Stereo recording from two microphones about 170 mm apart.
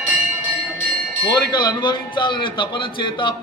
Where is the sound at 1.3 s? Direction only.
25° left (ahead or behind).